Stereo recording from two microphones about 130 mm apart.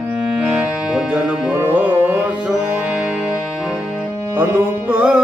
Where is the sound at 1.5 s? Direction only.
15° right (ahead or behind).